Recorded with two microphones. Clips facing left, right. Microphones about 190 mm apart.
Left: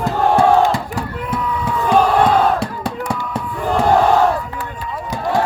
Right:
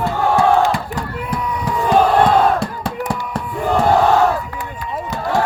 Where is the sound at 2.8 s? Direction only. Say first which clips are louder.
Even; 5° right (ahead or behind).